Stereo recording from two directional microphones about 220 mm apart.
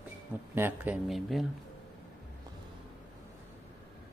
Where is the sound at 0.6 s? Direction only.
10° right (ahead or behind).